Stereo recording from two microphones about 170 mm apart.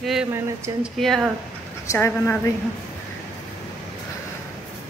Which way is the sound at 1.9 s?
15° left (ahead or behind).